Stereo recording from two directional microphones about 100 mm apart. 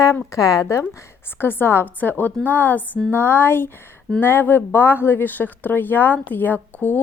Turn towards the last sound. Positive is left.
turn(degrees=20)  # may be behind; listen again after turning